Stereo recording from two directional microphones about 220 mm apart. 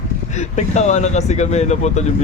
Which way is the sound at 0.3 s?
30° left (ahead or behind).